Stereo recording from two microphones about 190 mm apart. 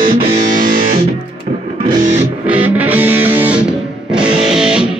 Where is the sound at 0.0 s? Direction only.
45° right (ahead or behind).